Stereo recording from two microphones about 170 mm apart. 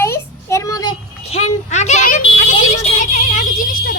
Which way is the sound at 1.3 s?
40° left (ahead or behind).